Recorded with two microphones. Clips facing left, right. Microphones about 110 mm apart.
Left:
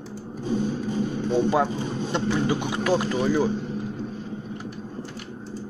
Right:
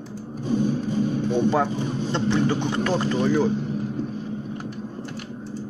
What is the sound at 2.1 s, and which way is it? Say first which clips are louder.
Speech: right 2 dB; 10° left (ahead or behind).